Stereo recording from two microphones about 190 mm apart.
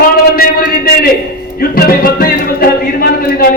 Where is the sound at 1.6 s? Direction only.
50° left (ahead or behind).